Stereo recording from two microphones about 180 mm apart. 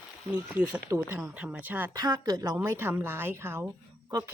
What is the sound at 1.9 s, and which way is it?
A woman's voice, 20° right (ahead or behind).